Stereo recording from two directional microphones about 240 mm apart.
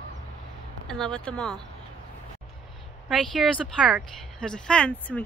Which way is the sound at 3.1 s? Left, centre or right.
Centre.